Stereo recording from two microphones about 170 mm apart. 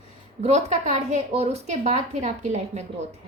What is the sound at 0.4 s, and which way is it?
A woman's voice, 40° right (ahead or behind).